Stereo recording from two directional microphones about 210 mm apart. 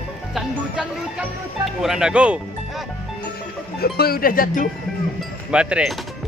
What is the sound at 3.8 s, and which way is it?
Cowbell, 45° left (ahead or behind).